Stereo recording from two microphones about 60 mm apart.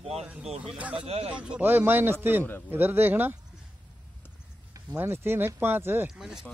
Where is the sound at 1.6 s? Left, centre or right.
Right.